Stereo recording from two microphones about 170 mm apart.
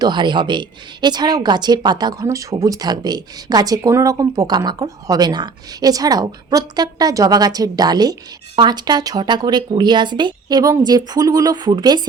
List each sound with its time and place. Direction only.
0.0 s speech: 25° right (ahead or behind)